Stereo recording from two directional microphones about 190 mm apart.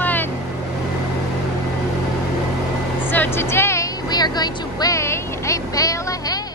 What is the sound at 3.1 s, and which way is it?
Vehicle, 10° left (ahead or behind).